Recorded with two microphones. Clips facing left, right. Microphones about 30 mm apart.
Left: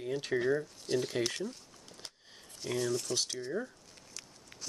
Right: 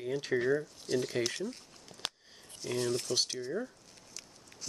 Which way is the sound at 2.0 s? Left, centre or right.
Right.